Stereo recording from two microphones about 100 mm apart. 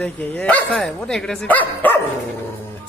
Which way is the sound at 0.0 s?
15° left (ahead or behind).